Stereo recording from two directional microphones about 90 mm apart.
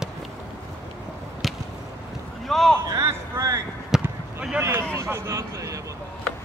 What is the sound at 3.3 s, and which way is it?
Speech, 25° right (ahead or behind).